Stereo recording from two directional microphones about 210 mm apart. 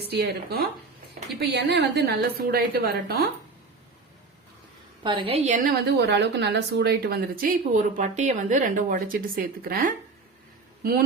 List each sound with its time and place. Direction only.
0.1 s speech: 50° right (ahead or behind)
5.0 s a woman's voice: 25° right (ahead or behind)
5.6 s speech: 55° right (ahead or behind)
7.9 s speech: 35° right (ahead or behind)